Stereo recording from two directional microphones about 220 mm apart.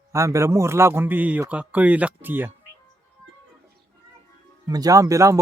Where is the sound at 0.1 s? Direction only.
15° right (ahead or behind).